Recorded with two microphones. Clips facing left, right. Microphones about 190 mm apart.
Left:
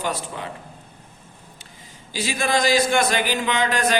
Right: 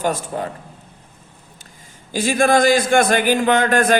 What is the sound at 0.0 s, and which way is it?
Speech, 45° right (ahead or behind).